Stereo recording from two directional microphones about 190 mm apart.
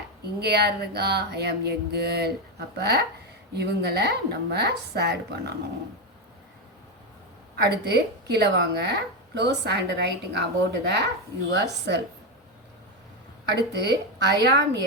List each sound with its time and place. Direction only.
0.3 s a woman's voice: 60° right (ahead or behind)
7.5 s a woman's voice: 60° right (ahead or behind)
13.4 s a woman's voice: 60° right (ahead or behind)